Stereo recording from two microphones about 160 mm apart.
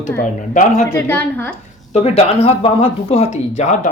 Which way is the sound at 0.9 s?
15° left (ahead or behind).